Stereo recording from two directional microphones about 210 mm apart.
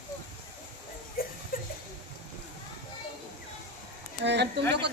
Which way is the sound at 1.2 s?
45° left (ahead or behind).